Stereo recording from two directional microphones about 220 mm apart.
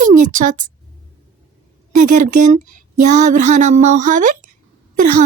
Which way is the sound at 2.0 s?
35° right (ahead or behind).